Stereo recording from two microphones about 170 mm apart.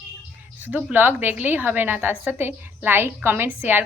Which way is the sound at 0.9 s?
10° right (ahead or behind).